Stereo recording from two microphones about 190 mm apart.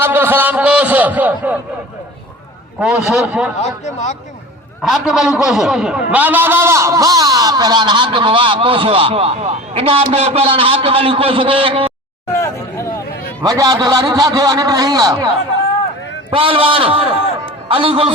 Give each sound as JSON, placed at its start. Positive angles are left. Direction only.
{"t": 0.0, "sound": "a sound", "side_deg": -10}
{"t": 2.8, "sound": "a man's voice", "side_deg": -5}
{"t": 3.6, "sound": "speech", "side_deg": 35}
{"t": 4.8, "sound": "a man's voice", "side_deg": 0}
{"t": 12.3, "sound": "hubbub", "side_deg": 15}
{"t": 13.4, "sound": "a man's voice", "side_deg": -20}
{"t": 16.3, "sound": "a man's voice", "side_deg": -30}